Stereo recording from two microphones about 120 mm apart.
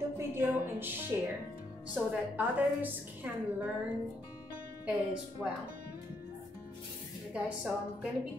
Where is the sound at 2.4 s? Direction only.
15° right (ahead or behind).